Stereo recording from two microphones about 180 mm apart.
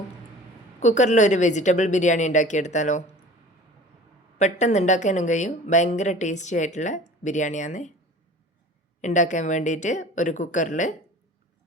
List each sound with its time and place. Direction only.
0.8 s speech: 40° left (ahead or behind)
4.4 s speech: 40° left (ahead or behind)
9.0 s speech: 45° left (ahead or behind)